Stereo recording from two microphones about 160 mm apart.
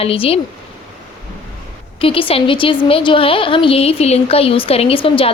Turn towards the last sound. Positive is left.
turn(degrees=35)  # may be behind; listen again after turning